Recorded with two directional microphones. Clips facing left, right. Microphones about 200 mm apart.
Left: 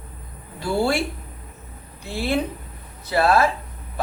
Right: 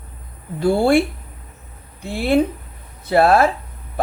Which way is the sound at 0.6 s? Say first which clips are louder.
Right 7 dB; 55° right (ahead or behind).